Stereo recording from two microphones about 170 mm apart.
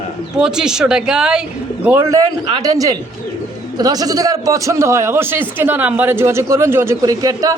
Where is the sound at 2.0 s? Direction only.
20° right (ahead or behind).